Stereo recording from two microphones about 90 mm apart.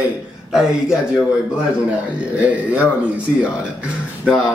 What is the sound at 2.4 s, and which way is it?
Speech, 15° right (ahead or behind).